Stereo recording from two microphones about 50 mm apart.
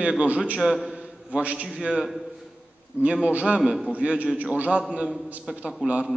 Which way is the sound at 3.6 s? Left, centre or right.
Centre.